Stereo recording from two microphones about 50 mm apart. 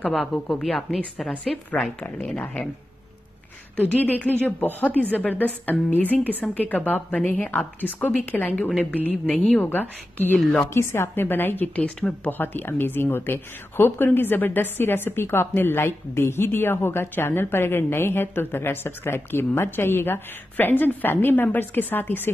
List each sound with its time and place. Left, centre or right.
0.2 s a woman's voice: centre
2.0 s a woman's voice: left
3.7 s a woman's voice: left
10.7 s a woman's voice: left
11.6 s speech: left
12.3 s a woman's voice: left